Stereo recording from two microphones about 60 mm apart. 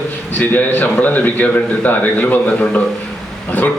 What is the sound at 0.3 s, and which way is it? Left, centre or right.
A man's voice, left.